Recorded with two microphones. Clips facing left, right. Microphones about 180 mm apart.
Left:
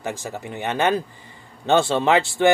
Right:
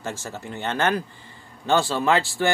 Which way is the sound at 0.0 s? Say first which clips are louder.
Left 3 dB; 15° left (ahead or behind).